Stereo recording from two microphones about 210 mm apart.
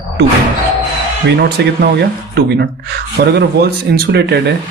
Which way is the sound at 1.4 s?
50° right (ahead or behind).